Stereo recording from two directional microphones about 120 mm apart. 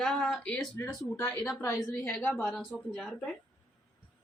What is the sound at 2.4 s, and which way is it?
Speech, 5° left (ahead or behind).